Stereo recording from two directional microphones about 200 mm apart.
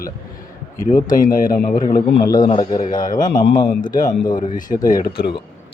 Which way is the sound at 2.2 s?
20° left (ahead or behind).